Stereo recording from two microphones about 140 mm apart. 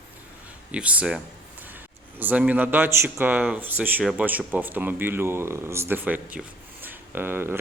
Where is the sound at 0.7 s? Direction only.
10° right (ahead or behind).